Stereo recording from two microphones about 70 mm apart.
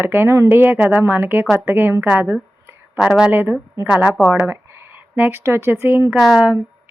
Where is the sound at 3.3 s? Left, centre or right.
Right.